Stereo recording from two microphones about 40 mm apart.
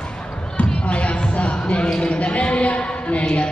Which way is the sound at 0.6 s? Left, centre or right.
Left.